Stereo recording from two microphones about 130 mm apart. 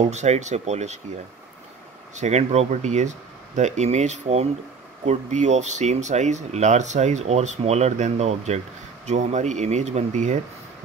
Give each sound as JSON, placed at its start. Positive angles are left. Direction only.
{"t": 0.1, "sound": "speech", "side_deg": -60}
{"t": 2.1, "sound": "speech", "side_deg": -60}